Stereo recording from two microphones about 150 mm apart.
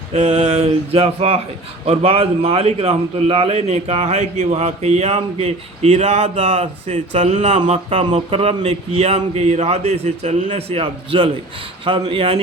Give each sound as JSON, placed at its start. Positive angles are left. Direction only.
{"t": 0.1, "sound": "a man's voice", "side_deg": -45}